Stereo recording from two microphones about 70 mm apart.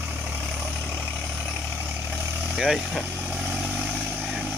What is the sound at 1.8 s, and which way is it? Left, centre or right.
Vehicle, right.